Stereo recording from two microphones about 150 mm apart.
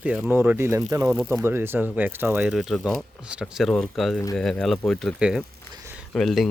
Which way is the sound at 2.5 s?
Centre (ahead or behind).